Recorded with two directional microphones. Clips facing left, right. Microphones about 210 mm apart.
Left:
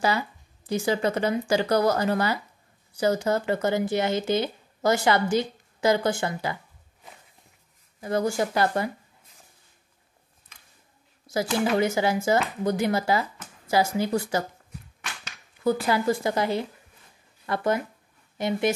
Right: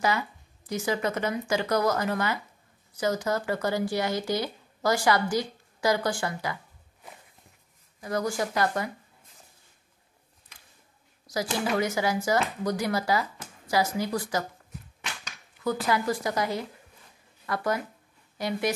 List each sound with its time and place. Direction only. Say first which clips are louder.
0.0 s speech: left 2 dB; 30° left (ahead or behind)
8.0 s speech: left 4 dB; 25° left (ahead or behind)
11.3 s a sound: left 4 dB; 25° left (ahead or behind)
11.7 s speech: left 2 dB; 25° left (ahead or behind)
15.6 s speech: left 4 dB; 30° left (ahead or behind)